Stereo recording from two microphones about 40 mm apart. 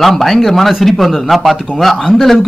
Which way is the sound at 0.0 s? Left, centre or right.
Centre.